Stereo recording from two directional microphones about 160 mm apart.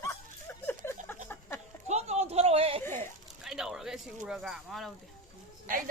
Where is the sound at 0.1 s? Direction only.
15° left (ahead or behind).